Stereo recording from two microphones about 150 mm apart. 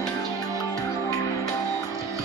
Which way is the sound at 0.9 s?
20° left (ahead or behind).